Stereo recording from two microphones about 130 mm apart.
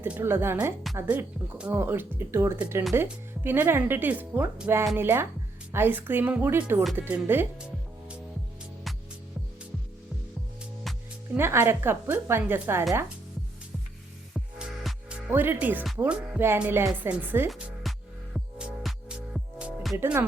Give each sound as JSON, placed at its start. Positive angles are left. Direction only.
{"t": 0.0, "sound": "speech", "side_deg": -15}
{"t": 10.9, "sound": "music", "side_deg": 0}
{"t": 11.3, "sound": "speech", "side_deg": -20}
{"t": 14.3, "sound": "music", "side_deg": -5}
{"t": 15.3, "sound": "speech", "side_deg": -15}
{"t": 17.8, "sound": "music", "side_deg": 0}
{"t": 20.0, "sound": "speech", "side_deg": -15}